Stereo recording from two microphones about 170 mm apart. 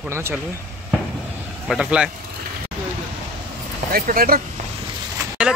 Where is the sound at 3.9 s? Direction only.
60° right (ahead or behind).